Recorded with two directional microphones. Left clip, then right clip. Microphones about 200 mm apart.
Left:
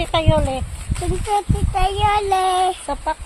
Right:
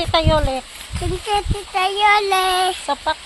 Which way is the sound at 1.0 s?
15° left (ahead or behind).